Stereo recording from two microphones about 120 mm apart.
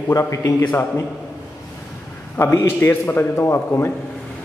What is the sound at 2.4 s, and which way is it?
A man's voice, 20° left (ahead or behind).